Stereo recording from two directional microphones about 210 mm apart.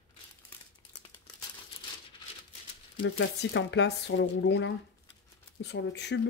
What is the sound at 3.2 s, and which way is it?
Speech, 60° left (ahead or behind).